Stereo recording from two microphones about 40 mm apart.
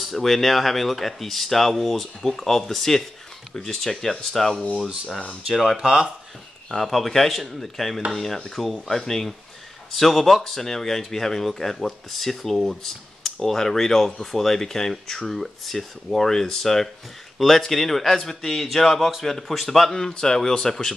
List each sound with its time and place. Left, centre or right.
0.0 s speech: centre
5.8 s speech: centre
6.7 s speech: centre
19.9 s speech: centre